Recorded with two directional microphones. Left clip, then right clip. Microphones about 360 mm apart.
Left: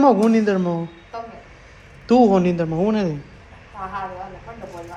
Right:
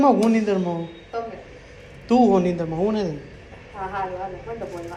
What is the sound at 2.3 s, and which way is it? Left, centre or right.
Speech, left.